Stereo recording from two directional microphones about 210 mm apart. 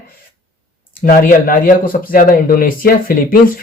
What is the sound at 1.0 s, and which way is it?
Speech, 45° left (ahead or behind).